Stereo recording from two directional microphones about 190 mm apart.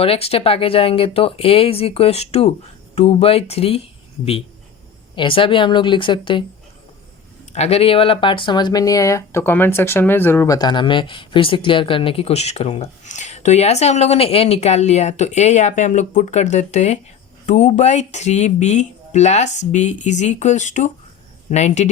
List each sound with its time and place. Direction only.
0.0 s speech: 30° left (ahead or behind)
5.1 s a woman's voice: 25° left (ahead or behind)
7.5 s speech: 35° left (ahead or behind)